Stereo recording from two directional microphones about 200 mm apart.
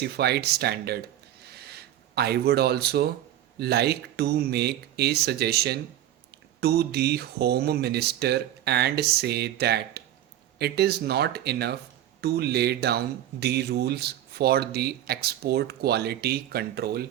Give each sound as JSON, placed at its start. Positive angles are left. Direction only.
{"t": 0.0, "sound": "speech", "side_deg": -55}
{"t": 1.5, "sound": "a sound", "side_deg": -55}
{"t": 3.6, "sound": "speech", "side_deg": -55}